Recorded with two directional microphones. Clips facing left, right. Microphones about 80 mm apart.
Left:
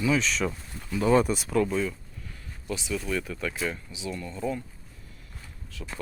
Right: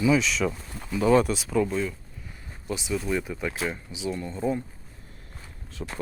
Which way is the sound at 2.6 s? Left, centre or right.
Right.